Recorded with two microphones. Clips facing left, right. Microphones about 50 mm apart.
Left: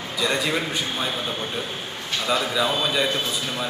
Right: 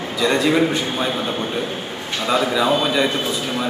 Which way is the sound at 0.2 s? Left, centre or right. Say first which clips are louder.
Right 7 dB; centre.